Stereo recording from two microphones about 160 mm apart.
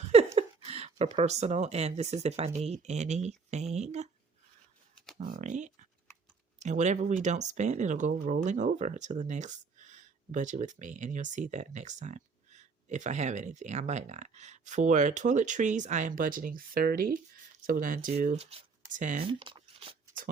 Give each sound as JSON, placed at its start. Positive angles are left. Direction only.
{"t": 0.3, "sound": "speech", "side_deg": -40}
{"t": 5.2, "sound": "speech", "side_deg": -50}
{"t": 19.3, "sound": "a sound", "side_deg": -30}